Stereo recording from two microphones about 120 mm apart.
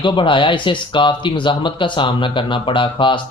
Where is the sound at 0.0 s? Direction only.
45° left (ahead or behind).